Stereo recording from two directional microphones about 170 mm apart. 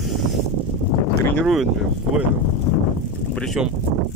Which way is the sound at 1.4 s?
Centre (ahead or behind).